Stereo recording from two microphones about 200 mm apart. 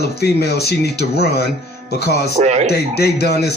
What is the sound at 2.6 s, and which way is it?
Speech, 55° left (ahead or behind).